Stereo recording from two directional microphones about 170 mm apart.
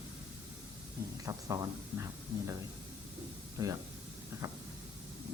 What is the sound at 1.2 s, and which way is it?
Speech, 20° right (ahead or behind).